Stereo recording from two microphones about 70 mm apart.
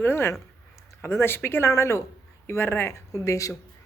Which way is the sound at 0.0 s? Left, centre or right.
Left.